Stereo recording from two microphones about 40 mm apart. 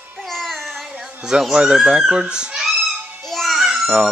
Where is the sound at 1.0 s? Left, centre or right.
Centre.